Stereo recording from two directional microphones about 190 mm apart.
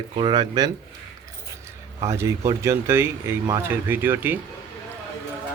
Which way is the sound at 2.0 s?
15° right (ahead or behind).